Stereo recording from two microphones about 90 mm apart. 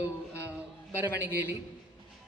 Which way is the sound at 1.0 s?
20° right (ahead or behind).